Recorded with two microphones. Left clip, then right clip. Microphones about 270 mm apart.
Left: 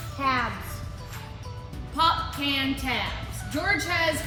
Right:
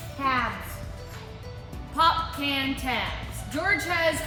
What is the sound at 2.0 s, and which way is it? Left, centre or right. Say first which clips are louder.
A woman's voice: right 1 dB; centre.